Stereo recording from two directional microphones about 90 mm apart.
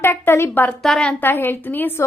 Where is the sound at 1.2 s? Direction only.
25° left (ahead or behind).